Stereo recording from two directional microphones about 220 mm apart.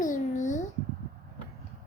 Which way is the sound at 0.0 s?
35° left (ahead or behind).